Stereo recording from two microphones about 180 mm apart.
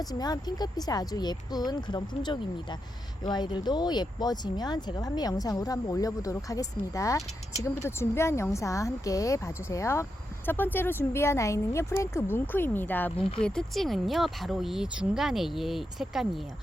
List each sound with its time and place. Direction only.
0.0 s speech: 20° left (ahead or behind); by 16.4 s centre (ahead or behind)